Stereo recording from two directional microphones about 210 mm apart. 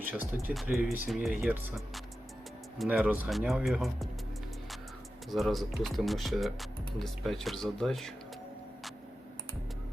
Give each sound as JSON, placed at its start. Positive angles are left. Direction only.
{"t": 0.0, "sound": "speech", "side_deg": -10}
{"t": 5.3, "sound": "speech", "side_deg": 0}